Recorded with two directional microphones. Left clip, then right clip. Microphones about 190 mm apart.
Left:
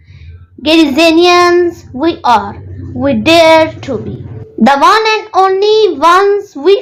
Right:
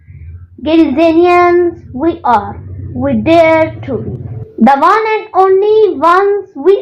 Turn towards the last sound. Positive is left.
turn(degrees=40)  # may be behind; listen again after turning